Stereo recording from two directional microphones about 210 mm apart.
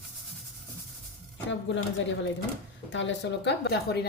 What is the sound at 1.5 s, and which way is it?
Speech, 60° left (ahead or behind).